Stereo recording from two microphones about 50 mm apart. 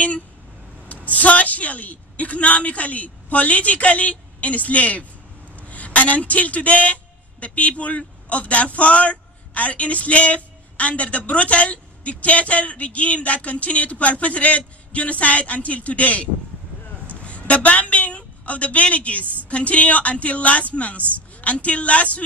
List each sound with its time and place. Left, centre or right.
0.8 s a man's voice: left
17.2 s a sound: left
19.5 s speech: left